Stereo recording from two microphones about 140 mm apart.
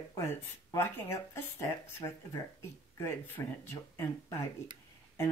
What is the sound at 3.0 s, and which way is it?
Speech, 15° left (ahead or behind).